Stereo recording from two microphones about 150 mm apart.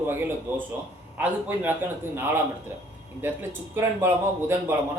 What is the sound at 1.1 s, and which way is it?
Speech, 10° right (ahead or behind).